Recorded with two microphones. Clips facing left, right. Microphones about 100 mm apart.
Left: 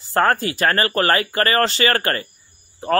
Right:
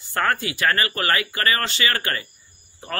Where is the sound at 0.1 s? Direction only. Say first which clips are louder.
Left 5 dB; 40° left (ahead or behind).